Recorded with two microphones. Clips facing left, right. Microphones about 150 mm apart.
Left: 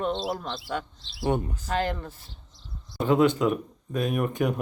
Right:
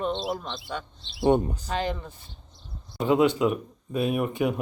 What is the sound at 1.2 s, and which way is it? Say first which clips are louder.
Speech: right 5 dB; 25° right (ahead or behind).